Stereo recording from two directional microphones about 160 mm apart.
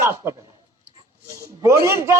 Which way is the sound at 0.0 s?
15° right (ahead or behind).